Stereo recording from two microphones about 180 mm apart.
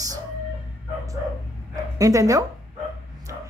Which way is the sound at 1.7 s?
20° right (ahead or behind).